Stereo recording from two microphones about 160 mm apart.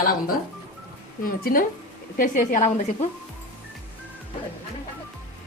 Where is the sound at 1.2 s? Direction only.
65° left (ahead or behind); by 3.1 s 50° left (ahead or behind).